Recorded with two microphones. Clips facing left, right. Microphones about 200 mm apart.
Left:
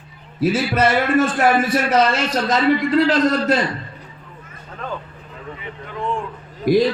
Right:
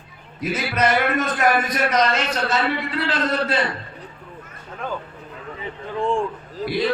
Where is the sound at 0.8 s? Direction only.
30° left (ahead or behind).